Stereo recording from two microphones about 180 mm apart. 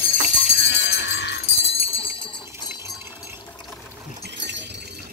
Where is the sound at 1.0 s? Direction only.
75° left (ahead or behind).